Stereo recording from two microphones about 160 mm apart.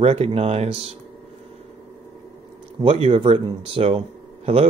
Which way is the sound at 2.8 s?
40° right (ahead or behind).